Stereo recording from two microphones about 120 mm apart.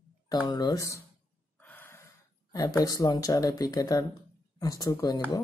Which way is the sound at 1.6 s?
15° left (ahead or behind).